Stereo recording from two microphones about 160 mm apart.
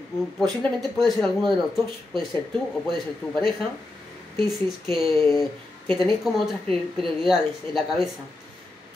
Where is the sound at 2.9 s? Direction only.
Centre (ahead or behind).